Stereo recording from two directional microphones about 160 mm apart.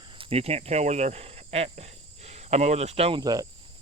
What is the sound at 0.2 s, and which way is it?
Speech, 35° right (ahead or behind).